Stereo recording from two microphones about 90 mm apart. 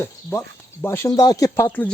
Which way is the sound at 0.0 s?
25° left (ahead or behind).